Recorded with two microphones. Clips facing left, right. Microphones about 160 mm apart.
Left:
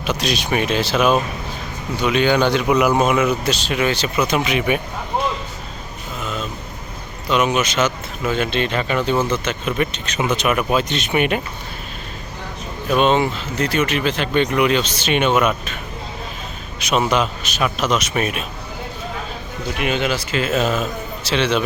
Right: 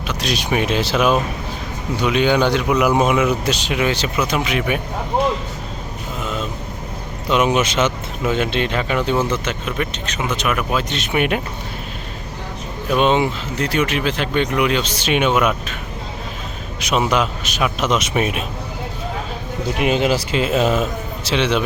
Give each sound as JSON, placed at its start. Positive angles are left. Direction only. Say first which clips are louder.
{"t": 0.3, "sound": "speech", "louder": "right 2 dB", "side_deg": -5}
{"t": 2.6, "sound": "speech", "louder": "even", "side_deg": 0}
{"t": 3.4, "sound": "speech", "louder": "even", "side_deg": -15}
{"t": 4.3, "sound": "speech", "louder": "left 1 dB", "side_deg": 0}
{"t": 7.3, "sound": "speech", "louder": "right 1 dB", "side_deg": -20}
{"t": 9.6, "sound": "speech", "louder": "left 2 dB", "side_deg": 10}
{"t": 13.0, "sound": "speech", "louder": "even", "side_deg": -15}
{"t": 16.9, "sound": "speech", "louder": "even", "side_deg": -10}
{"t": 17.7, "sound": "speech", "louder": "right 2 dB", "side_deg": -20}
{"t": 19.8, "sound": "speech", "louder": "right 4 dB", "side_deg": -35}